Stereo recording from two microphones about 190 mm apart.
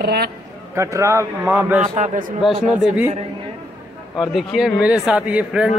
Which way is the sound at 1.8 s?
40° right (ahead or behind).